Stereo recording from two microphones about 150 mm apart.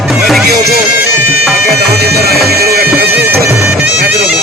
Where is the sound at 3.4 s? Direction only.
20° right (ahead or behind).